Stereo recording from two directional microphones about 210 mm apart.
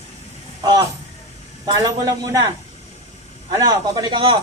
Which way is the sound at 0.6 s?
20° right (ahead or behind).